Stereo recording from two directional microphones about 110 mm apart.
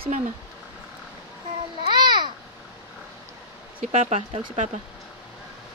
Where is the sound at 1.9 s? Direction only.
40° right (ahead or behind).